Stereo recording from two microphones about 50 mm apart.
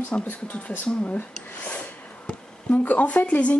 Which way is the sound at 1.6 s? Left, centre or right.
Left.